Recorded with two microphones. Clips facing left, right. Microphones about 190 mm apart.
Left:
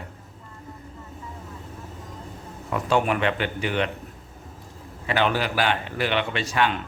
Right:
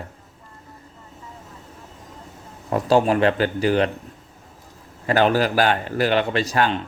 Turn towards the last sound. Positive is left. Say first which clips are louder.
# right 3 dB
turn(degrees=-40)  # may be behind; listen again after turning